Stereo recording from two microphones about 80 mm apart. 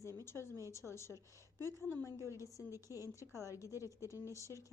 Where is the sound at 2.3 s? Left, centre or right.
Right.